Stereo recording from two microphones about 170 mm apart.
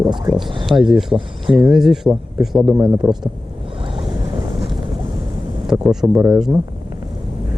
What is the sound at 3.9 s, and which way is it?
Boat, 30° right (ahead or behind).